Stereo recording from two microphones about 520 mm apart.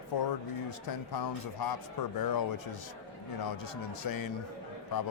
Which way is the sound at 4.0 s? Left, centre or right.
Left.